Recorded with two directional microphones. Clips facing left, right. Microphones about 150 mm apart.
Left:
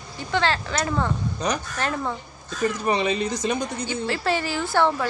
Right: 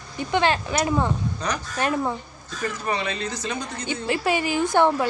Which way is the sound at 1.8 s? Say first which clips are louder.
Right 7 dB; 15° right (ahead or behind).